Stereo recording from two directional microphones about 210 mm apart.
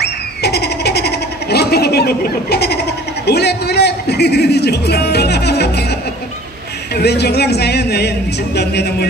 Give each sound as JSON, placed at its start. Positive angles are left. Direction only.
{"t": 0.0, "sound": "a sound", "side_deg": 50}
{"t": 3.3, "sound": "music", "side_deg": 50}
{"t": 6.9, "sound": "speech", "side_deg": 50}